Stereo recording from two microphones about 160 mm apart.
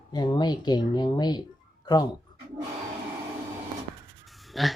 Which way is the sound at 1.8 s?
25° left (ahead or behind).